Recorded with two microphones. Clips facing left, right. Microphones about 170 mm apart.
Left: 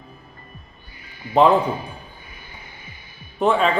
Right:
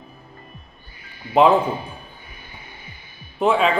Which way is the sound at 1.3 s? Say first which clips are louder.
Even; 5° right (ahead or behind).